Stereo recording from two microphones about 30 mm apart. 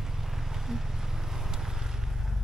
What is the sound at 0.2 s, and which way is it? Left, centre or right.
Vehicle, centre.